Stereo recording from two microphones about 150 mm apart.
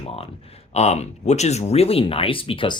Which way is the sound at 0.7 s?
45° left (ahead or behind).